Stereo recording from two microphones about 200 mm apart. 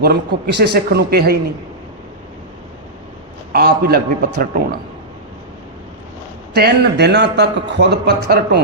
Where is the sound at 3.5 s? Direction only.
50° right (ahead or behind).